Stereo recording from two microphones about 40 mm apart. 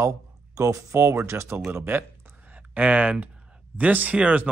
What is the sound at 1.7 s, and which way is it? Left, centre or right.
Speech, right.